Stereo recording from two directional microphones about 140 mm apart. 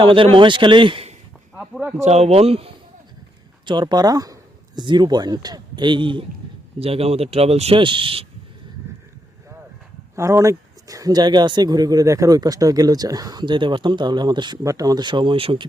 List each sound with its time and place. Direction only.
0.0 s a man's voice: 40° right (ahead or behind)
1.5 s a sound: 5° right (ahead or behind)
2.0 s speech: 50° right (ahead or behind)
3.7 s speech: 30° right (ahead or behind)
8.9 s a sound: 20° right (ahead or behind)
10.2 s speech: 20° right (ahead or behind); by 15.6 s 40° right (ahead or behind)